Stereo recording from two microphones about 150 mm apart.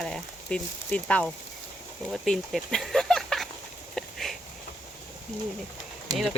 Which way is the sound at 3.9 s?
Centre (ahead or behind).